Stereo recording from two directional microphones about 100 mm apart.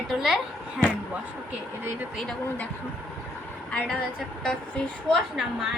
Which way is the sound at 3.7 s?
5° left (ahead or behind).